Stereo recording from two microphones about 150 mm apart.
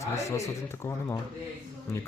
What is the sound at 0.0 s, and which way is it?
Speech, 20° left (ahead or behind).